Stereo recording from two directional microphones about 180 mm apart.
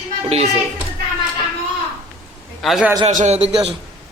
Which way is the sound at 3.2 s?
35° right (ahead or behind).